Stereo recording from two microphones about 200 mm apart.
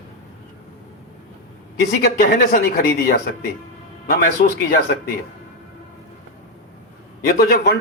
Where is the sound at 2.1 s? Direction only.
45° left (ahead or behind).